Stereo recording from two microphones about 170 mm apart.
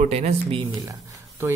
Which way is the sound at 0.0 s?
40° right (ahead or behind).